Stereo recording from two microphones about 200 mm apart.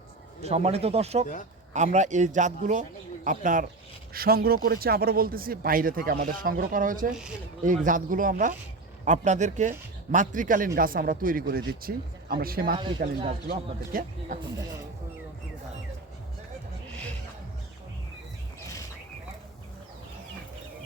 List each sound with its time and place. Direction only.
0.4 s a man's voice: 30° right (ahead or behind); by 12.7 s 50° right (ahead or behind)
12.7 s speech: 25° right (ahead or behind)
13.5 s a man's voice: 45° right (ahead or behind)